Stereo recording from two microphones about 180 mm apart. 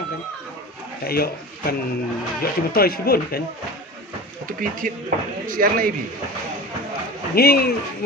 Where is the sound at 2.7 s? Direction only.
60° left (ahead or behind).